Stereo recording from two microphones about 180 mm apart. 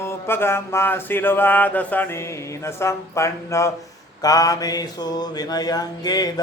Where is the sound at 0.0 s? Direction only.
15° left (ahead or behind).